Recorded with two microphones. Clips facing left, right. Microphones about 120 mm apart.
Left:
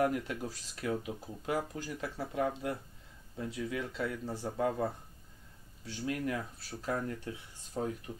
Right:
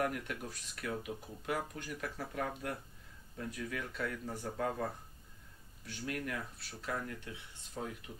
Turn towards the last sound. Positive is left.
turn(degrees=30)  # may be behind; listen again after turning